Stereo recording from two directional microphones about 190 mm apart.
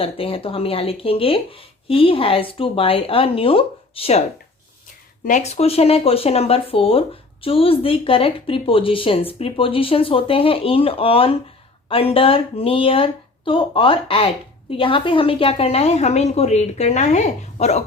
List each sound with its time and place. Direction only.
0.0 s speech: 30° left (ahead or behind)
5.2 s a woman's voice: 40° left (ahead or behind)